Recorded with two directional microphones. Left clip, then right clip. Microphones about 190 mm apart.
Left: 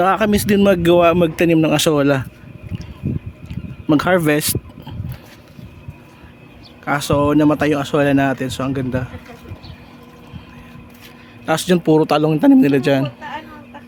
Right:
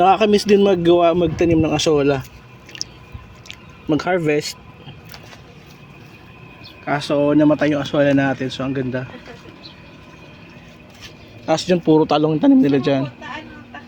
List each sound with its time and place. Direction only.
0.0 s speech: 20° left (ahead or behind)
0.6 s a man's voice: 40° left (ahead or behind)
2.7 s a sound: 20° right (ahead or behind)
3.8 s a man's voice: 45° left (ahead or behind)
6.8 s speech: 25° left (ahead or behind)
11.4 s speech: 30° left (ahead or behind)